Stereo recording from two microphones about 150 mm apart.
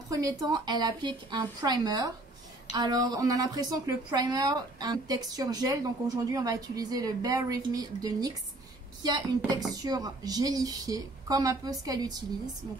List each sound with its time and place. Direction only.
0.1 s a woman's voice: 25° right (ahead or behind)